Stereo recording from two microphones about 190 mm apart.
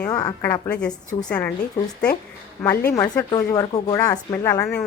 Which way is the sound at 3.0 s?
15° left (ahead or behind).